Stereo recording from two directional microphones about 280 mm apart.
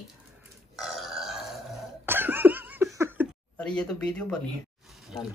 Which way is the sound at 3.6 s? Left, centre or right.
Centre.